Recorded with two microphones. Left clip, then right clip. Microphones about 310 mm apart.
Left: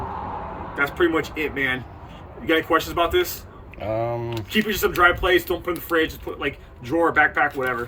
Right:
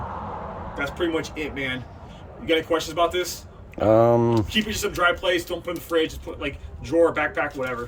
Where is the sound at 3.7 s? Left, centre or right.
Right.